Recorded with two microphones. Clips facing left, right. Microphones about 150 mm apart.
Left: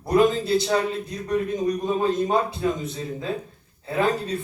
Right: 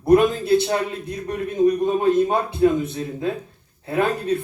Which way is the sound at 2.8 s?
60° right (ahead or behind).